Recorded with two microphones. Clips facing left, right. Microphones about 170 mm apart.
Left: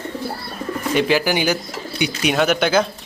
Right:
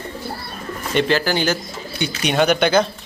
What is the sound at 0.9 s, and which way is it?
Speech, 10° left (ahead or behind).